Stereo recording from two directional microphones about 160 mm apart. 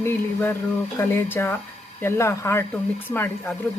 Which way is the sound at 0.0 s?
10° left (ahead or behind).